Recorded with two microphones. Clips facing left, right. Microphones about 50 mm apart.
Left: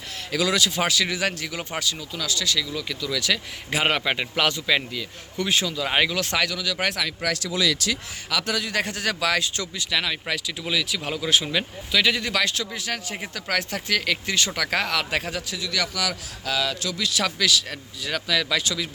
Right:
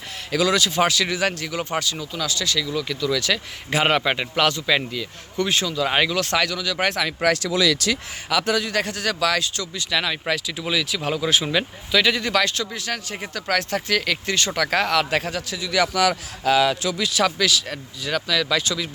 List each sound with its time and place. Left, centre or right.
0.3 s a man's voice: centre
7.2 s speech: right
7.5 s speech: right
8.3 s a man's voice: centre
8.5 s a man's voice: centre
8.8 s speech: centre
9.7 s a man's voice: centre
15.9 s speech: right; by 17.1 s centre
17.1 s a man's voice: centre